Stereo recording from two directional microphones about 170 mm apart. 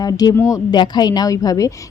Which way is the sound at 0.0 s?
20° left (ahead or behind).